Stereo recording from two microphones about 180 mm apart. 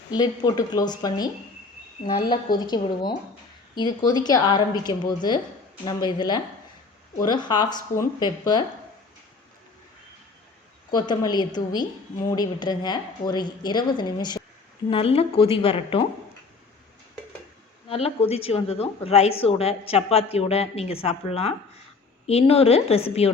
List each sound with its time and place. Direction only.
0.1 s a woman's voice: 20° left (ahead or behind)
10.9 s a woman's voice: 20° left (ahead or behind)
17.8 s speech: 35° left (ahead or behind)